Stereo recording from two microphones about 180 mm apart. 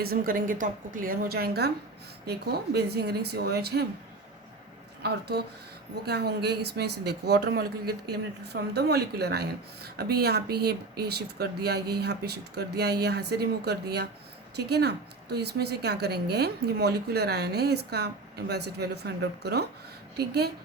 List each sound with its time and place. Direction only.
0.0 s a woman's voice: 55° right (ahead or behind)
6.1 s speech: 65° right (ahead or behind)